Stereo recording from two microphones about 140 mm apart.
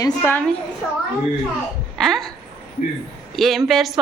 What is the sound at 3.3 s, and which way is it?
Speech, centre (ahead or behind).